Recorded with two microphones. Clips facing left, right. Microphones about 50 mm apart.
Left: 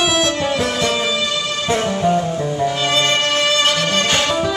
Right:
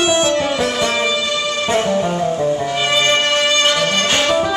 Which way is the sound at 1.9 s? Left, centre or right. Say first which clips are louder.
Even; centre.